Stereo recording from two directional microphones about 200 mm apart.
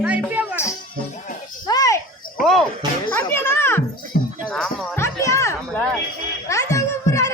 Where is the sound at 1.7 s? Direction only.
15° left (ahead or behind).